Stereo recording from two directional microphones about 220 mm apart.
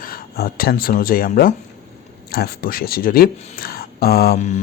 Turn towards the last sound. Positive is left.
turn(degrees=40)  # may be behind; listen again after turning